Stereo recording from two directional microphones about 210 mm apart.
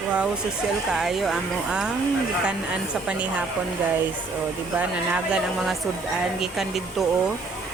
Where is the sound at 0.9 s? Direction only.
Centre (ahead or behind).